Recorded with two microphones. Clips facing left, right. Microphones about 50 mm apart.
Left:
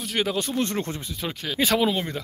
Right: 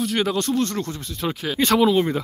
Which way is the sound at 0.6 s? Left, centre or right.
Left.